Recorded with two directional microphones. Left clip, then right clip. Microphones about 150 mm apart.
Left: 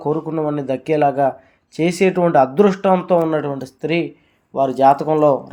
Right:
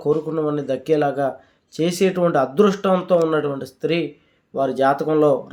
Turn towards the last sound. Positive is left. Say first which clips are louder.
# left 4 dB
turn(degrees=10)  # may be behind; listen again after turning